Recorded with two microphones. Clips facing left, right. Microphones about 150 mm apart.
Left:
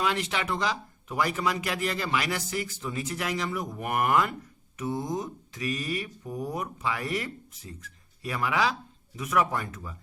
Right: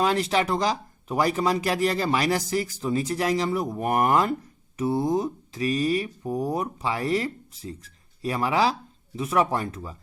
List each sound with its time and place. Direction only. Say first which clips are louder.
0.0 s speech: right 6 dB; 35° right (ahead or behind)